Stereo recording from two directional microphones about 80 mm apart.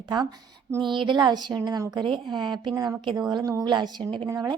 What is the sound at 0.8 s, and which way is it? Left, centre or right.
Speech, right.